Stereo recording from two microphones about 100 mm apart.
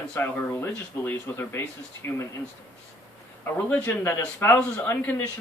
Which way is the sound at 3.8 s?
20° left (ahead or behind).